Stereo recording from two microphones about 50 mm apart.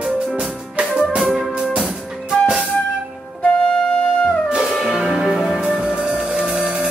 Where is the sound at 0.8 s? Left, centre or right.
Right.